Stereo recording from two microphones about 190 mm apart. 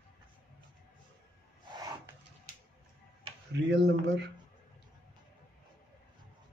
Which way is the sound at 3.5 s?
65° right (ahead or behind).